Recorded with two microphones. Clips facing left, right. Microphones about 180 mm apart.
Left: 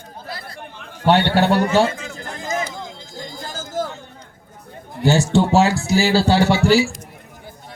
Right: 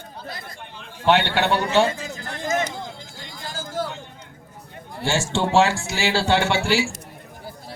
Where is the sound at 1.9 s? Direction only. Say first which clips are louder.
Even; 35° right (ahead or behind).